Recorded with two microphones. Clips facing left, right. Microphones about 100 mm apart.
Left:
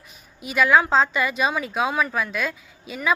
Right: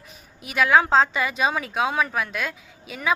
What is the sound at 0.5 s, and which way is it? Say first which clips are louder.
A woman's voice: even; 25° right (ahead or behind).